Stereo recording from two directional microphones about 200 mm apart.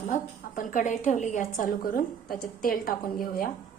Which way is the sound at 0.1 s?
40° left (ahead or behind).